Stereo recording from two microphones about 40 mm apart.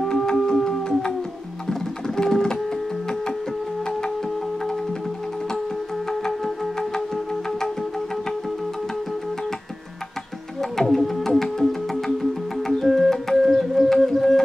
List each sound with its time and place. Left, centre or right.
0.0 s music: centre
6.0 s music: centre
10.6 s music: centre
11.5 s organ: centre
13.4 s a sound: centre